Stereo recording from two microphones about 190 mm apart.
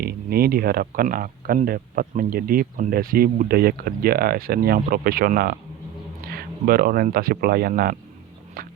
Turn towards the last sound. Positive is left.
turn(degrees=-50)  # may be behind; listen again after turning